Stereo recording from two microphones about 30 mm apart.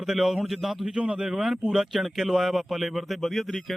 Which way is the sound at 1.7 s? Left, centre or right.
Centre.